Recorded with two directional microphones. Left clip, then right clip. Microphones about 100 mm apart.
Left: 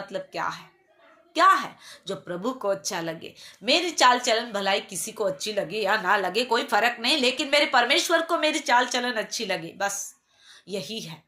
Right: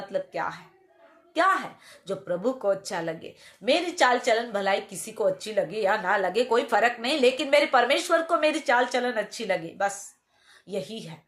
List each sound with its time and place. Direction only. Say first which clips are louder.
0.1 s speech: right 1 dB; 35° right (ahead or behind)